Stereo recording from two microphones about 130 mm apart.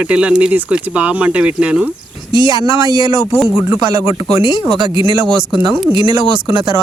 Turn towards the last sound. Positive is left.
turn(degrees=-35)  # may be behind; listen again after turning